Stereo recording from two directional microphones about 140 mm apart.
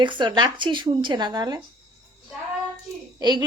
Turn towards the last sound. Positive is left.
turn(degrees=-30)  # may be behind; listen again after turning